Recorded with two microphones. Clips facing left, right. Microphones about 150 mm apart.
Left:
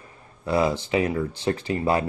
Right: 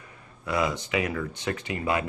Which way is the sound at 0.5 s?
30° left (ahead or behind).